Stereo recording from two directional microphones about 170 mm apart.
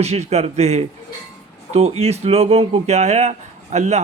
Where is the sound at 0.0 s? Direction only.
40° right (ahead or behind).